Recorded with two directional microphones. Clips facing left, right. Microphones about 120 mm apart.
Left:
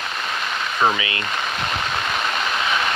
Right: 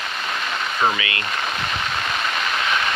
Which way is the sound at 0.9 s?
25° left (ahead or behind).